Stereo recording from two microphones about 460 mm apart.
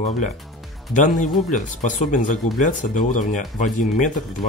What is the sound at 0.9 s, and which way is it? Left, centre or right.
Speech, centre.